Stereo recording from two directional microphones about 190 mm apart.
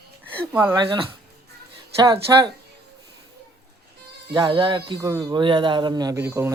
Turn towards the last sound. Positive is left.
turn(degrees=-15)  # may be behind; listen again after turning